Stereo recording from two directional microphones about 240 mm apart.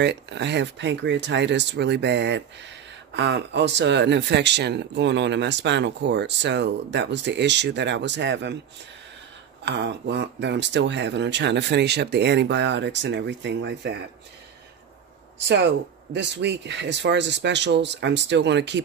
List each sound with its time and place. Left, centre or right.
0.0 s speech: right
9.7 s speech: right
15.4 s speech: right